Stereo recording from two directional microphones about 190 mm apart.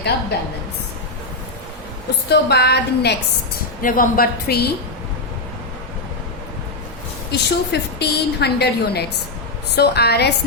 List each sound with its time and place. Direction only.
0.3 s a woman's voice: 60° left (ahead or behind)
2.3 s a woman's voice: 60° left (ahead or behind)
7.3 s a woman's voice: 60° left (ahead or behind)